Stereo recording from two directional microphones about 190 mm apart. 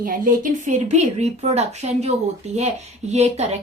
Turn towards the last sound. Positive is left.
turn(degrees=-35)  # may be behind; listen again after turning